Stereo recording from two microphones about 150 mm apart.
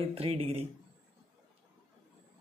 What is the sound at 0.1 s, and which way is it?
Speech, 40° right (ahead or behind).